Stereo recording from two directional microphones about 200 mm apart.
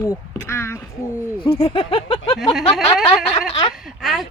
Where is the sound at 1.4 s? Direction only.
30° left (ahead or behind).